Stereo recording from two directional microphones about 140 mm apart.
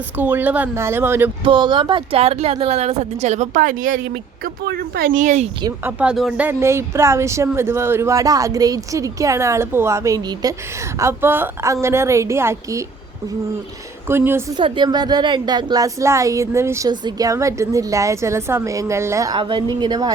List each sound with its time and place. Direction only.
0.2 s speech: 15° right (ahead or behind)
1.5 s speech: 35° right (ahead or behind); by 4.0 s 75° right (ahead or behind)
4.4 s speech: 90° right; by 5.5 s 60° right (ahead or behind)
5.8 s speech: 10° right (ahead or behind)
14.1 s speech: 15° right (ahead or behind)
14.5 s speech: 30° right (ahead or behind)
19.4 s a woman's voice: 35° right (ahead or behind)